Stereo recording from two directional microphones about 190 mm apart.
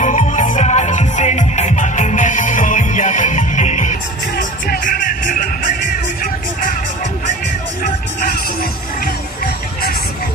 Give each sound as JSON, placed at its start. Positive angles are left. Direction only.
{"t": 0.0, "sound": "music", "side_deg": 40}